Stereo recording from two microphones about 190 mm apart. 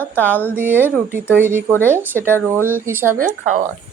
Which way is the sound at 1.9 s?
10° right (ahead or behind).